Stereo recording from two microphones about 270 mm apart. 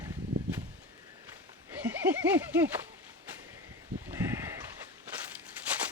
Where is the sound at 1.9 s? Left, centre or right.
Centre.